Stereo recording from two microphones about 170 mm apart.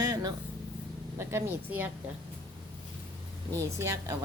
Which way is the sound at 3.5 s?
20° right (ahead or behind).